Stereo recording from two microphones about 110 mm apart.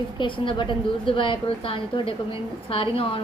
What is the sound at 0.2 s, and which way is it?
A woman's voice, 50° left (ahead or behind).